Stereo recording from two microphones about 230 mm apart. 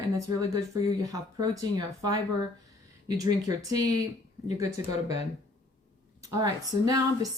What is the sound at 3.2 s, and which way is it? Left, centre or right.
Speech, centre.